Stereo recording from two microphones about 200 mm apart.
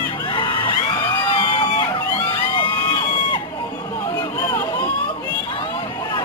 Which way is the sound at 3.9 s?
15° left (ahead or behind).